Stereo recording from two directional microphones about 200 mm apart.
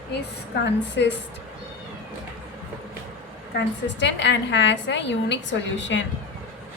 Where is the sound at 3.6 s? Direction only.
65° left (ahead or behind).